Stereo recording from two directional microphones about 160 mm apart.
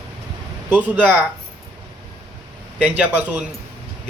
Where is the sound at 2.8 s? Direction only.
10° right (ahead or behind).